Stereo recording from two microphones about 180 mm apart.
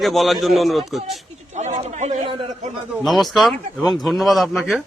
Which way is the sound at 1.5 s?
40° right (ahead or behind).